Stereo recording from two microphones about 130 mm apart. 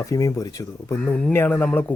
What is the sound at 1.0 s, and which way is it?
Speech, 10° left (ahead or behind).